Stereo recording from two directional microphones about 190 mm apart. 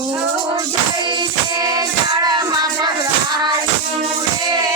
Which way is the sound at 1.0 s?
25° right (ahead or behind).